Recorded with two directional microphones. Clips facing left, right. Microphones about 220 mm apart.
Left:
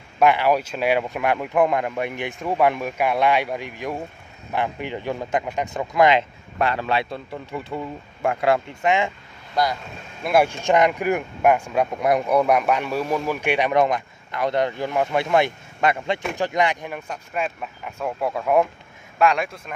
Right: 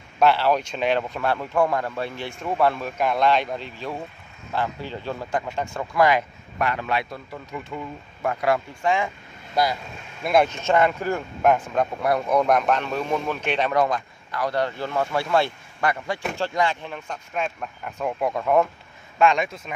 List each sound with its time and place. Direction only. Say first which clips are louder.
0.2 s speech: left 1 dB; 10° left (ahead or behind)
10.2 s speech: left 1 dB; 10° left (ahead or behind)